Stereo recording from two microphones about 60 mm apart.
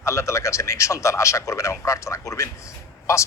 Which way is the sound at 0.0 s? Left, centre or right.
Left.